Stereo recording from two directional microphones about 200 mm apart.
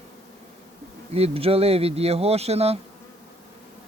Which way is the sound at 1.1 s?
30° right (ahead or behind).